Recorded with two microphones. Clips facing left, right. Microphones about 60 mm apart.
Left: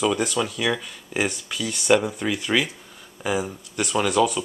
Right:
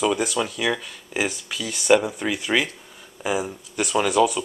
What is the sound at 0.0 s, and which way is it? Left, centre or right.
Speech, centre.